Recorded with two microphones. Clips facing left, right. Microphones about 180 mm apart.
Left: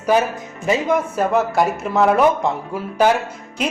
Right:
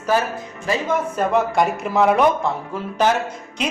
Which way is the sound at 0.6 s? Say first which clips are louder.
Left 4 dB; 20° left (ahead or behind).